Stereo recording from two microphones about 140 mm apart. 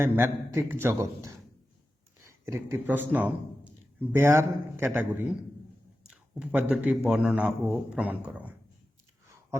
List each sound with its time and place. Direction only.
0.0 s speech: 15° right (ahead or behind)